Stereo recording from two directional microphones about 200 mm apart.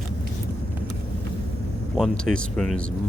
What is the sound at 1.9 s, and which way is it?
Speech, centre (ahead or behind).